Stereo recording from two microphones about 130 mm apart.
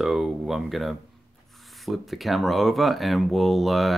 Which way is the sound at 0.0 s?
5° right (ahead or behind).